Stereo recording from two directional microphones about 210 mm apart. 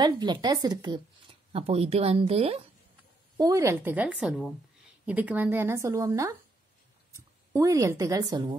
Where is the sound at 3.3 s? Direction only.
15° right (ahead or behind).